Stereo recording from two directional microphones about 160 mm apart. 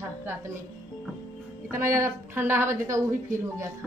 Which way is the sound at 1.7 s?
15° right (ahead or behind).